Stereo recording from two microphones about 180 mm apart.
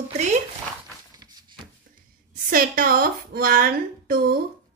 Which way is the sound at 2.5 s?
55° right (ahead or behind).